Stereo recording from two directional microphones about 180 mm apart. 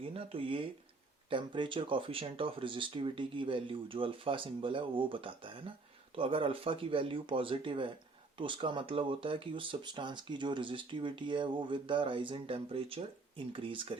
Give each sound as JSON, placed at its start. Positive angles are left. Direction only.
{"t": 0.0, "sound": "speech", "side_deg": -30}